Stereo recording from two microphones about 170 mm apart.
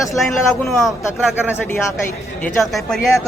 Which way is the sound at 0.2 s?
Centre (ahead or behind).